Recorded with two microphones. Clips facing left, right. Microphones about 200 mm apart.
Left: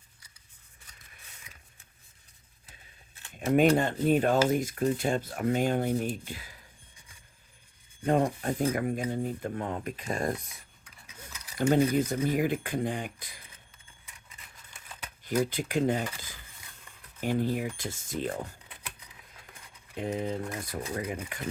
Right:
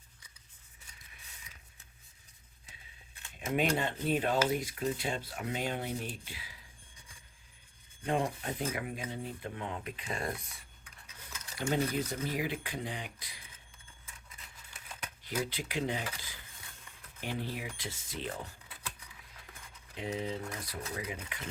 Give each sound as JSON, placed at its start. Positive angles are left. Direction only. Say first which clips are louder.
{"t": 3.3, "sound": "speech", "louder": "left 9 dB", "side_deg": 45}
{"t": 8.0, "sound": "speech", "louder": "left 7 dB", "side_deg": 45}
{"t": 11.5, "sound": "speech", "louder": "left 8 dB", "side_deg": 45}
{"t": 15.4, "sound": "speech", "louder": "left 7 dB", "side_deg": 45}
{"t": 17.2, "sound": "speech", "louder": "left 10 dB", "side_deg": 45}
{"t": 20.0, "sound": "speech", "louder": "left 5 dB", "side_deg": 50}